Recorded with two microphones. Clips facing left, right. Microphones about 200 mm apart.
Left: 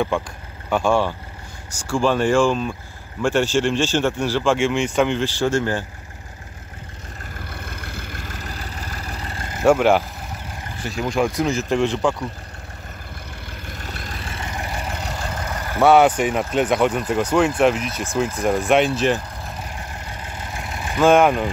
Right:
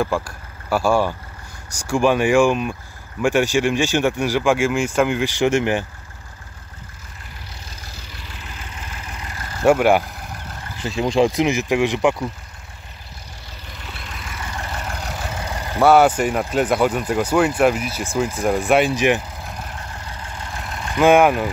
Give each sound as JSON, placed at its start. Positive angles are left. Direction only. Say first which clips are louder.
{"t": 0.1, "sound": "speech", "louder": "even", "side_deg": 0}
{"t": 5.2, "sound": "speech", "louder": "right 2 dB", "side_deg": -15}
{"t": 7.3, "sound": "vehicle", "louder": "left 7 dB", "side_deg": 55}
{"t": 9.7, "sound": "speech", "louder": "right 1 dB", "side_deg": -5}
{"t": 11.0, "sound": "speech", "louder": "right 4 dB", "side_deg": -25}
{"t": 13.5, "sound": "vehicle", "louder": "left 3 dB", "side_deg": 50}
{"t": 14.5, "sound": "vehicle", "louder": "even", "side_deg": 15}
{"t": 15.8, "sound": "speech", "louder": "even", "side_deg": 0}
{"t": 20.1, "sound": "vehicle", "louder": "even", "side_deg": 15}
{"t": 21.0, "sound": "speech", "louder": "right 1 dB", "side_deg": -10}